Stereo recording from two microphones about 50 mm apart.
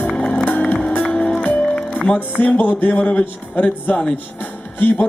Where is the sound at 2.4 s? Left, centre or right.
Left.